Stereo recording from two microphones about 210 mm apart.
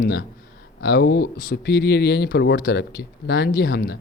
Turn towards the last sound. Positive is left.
turn(degrees=50)  # may be behind; listen again after turning